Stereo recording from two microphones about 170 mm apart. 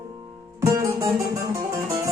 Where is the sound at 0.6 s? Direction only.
20° right (ahead or behind).